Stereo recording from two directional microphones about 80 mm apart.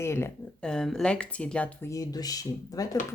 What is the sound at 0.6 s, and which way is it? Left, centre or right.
Speech, centre.